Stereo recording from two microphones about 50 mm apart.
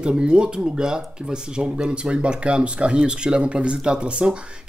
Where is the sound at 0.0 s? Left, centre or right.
Centre.